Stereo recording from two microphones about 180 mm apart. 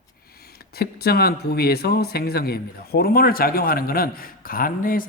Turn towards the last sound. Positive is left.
turn(degrees=50)  # may be behind; listen again after turning